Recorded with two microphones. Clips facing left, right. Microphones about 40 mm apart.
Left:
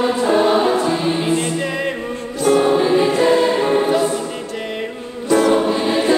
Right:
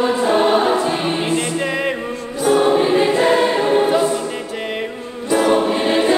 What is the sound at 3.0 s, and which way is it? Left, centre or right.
Choir, right.